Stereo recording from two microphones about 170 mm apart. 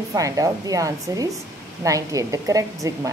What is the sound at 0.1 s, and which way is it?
A woman's voice, 20° right (ahead or behind).